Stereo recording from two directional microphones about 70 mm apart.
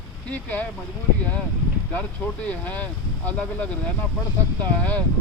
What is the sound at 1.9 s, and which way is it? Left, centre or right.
Speech, left.